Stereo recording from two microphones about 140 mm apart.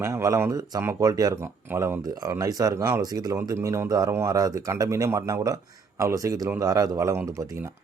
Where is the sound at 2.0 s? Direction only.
25° right (ahead or behind).